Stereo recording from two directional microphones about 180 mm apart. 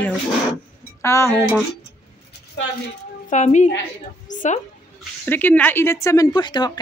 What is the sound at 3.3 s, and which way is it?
A woman's voice, 40° left (ahead or behind).